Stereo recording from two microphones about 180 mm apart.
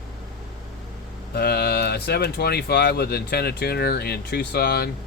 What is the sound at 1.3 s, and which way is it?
Speech, 60° left (ahead or behind).